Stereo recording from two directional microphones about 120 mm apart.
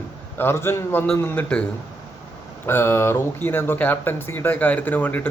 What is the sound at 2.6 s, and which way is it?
Speech, 20° left (ahead or behind).